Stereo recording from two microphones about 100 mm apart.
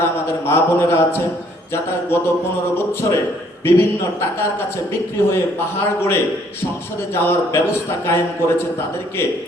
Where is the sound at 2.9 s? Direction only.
25° left (ahead or behind).